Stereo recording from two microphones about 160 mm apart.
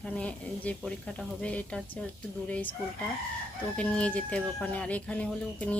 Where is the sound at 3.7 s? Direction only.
5° left (ahead or behind).